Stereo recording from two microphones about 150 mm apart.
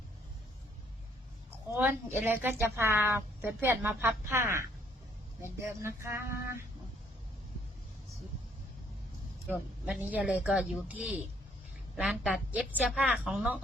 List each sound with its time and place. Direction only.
1.7 s a woman's voice: 15° right (ahead or behind)
9.5 s a woman's voice: 5° right (ahead or behind)